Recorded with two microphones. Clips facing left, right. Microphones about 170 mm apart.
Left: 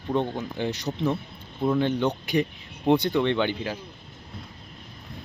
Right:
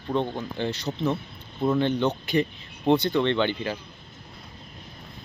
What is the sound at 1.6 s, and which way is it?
Speech, centre (ahead or behind).